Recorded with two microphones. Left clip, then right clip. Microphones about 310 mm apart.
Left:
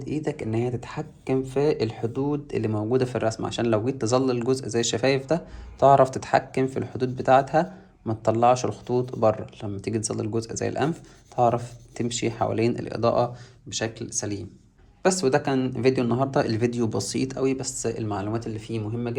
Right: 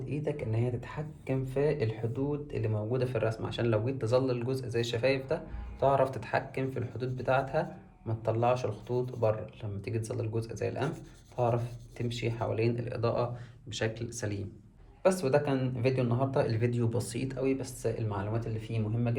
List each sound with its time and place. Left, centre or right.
0.0 s speech: left
15.0 s speech: left